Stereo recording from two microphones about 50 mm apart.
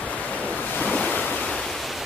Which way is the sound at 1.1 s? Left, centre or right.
Left.